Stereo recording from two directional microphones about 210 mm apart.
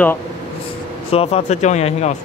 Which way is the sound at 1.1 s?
30° left (ahead or behind).